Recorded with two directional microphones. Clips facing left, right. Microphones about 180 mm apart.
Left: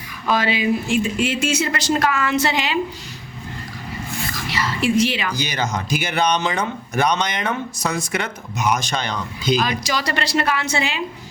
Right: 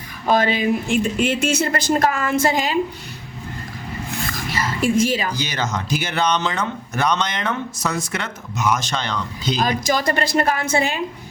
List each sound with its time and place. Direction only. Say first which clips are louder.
0.3 s speech: right 2 dB; 50° right (ahead or behind)
4.4 s a sound: even; 45° right (ahead or behind)
5.4 s speech: left 1 dB; 15° left (ahead or behind)
9.6 s speech: right 3 dB; 50° right (ahead or behind)